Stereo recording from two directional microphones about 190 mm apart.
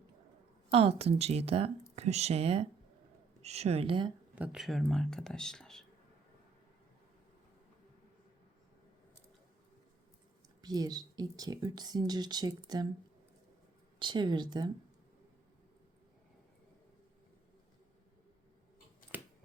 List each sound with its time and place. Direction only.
0.7 s speech: 30° right (ahead or behind)
4.4 s speech: 5° right (ahead or behind)
10.6 s speech: 20° right (ahead or behind)
14.0 s speech: 25° right (ahead or behind)